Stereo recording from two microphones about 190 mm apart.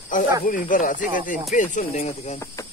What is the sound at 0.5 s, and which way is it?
Speech, 45° left (ahead or behind).